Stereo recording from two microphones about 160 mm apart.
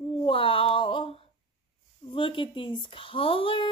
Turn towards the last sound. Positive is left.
turn(degrees=35)  # may be behind; listen again after turning